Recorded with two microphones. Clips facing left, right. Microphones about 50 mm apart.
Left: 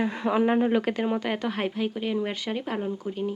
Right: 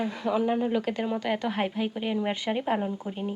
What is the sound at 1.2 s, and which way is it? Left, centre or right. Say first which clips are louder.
A woman's voice: even; centre.